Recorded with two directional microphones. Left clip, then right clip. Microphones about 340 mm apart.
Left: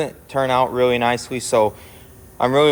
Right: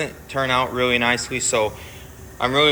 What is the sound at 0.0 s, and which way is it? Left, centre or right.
A man's voice, centre.